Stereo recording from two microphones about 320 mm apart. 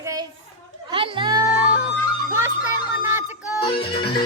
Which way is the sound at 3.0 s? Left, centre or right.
Centre.